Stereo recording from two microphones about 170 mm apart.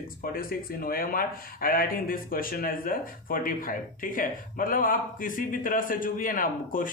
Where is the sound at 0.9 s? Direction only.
60° left (ahead or behind).